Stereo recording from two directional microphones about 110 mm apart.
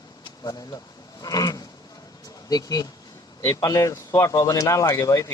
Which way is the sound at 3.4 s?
30° left (ahead or behind).